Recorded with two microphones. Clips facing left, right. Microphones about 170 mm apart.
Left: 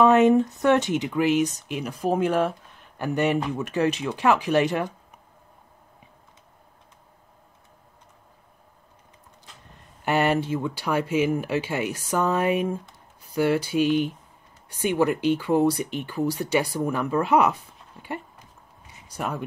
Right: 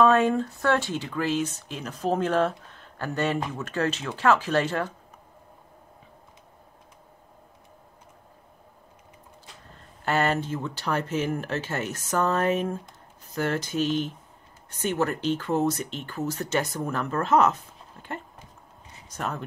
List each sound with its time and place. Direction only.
0.0 s speech: 20° left (ahead or behind)
10.0 s speech: 15° left (ahead or behind)